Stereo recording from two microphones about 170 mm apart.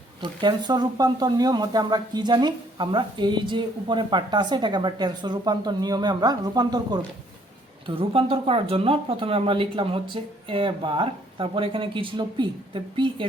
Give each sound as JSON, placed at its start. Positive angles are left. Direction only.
{"t": 0.2, "sound": "speech", "side_deg": -25}